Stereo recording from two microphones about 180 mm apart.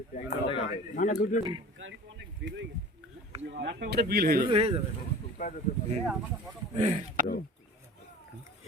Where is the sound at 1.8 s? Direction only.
85° right.